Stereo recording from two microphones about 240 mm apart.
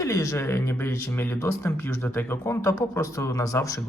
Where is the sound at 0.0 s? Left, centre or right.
Centre.